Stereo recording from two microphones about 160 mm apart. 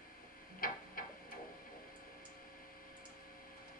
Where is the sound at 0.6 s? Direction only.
65° left (ahead or behind).